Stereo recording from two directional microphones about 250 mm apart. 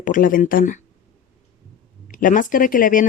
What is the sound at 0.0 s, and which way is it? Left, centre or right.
Speech, left.